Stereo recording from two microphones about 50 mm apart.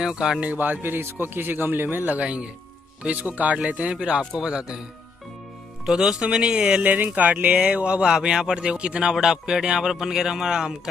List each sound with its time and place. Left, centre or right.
0.0 s a man's voice: centre
0.6 s a man's voice: right
2.1 s speech: right
3.0 s a man's voice: right; by 4.7 s centre
5.9 s a man's voice: centre
6.8 s speech: right
7.6 s speech: right
9.1 s a man's voice: centre